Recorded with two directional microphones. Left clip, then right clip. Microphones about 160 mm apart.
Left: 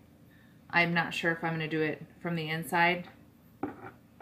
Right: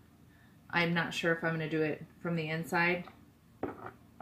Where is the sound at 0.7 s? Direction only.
10° right (ahead or behind).